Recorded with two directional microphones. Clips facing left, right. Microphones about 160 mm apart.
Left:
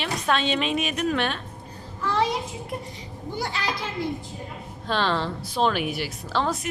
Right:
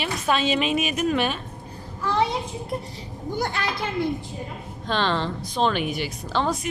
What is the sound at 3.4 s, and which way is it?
Speech, 50° right (ahead or behind).